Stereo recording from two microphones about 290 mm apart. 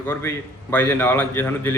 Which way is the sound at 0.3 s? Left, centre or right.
Centre.